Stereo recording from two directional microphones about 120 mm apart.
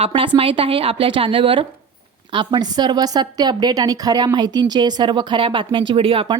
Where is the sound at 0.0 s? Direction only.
50° right (ahead or behind).